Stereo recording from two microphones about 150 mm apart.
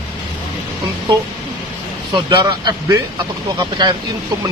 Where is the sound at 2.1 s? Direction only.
30° right (ahead or behind).